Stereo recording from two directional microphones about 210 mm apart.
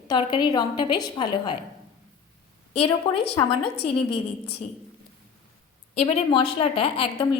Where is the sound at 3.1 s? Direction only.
20° left (ahead or behind).